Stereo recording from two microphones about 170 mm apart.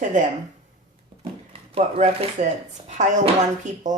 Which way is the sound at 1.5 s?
35° right (ahead or behind).